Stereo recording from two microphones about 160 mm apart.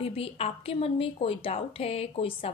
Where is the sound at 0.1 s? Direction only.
35° left (ahead or behind).